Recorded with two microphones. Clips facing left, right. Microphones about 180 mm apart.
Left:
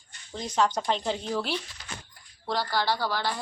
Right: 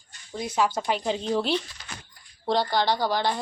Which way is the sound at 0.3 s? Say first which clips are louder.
Right 1 dB; 10° right (ahead or behind).